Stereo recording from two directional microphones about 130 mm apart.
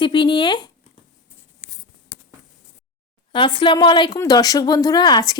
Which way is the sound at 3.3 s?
40° left (ahead or behind).